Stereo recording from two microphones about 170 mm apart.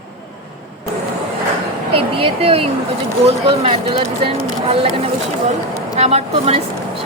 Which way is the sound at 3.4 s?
35° right (ahead or behind).